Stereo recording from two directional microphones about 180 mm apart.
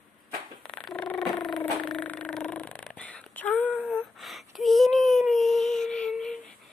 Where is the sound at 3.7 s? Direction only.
Centre (ahead or behind).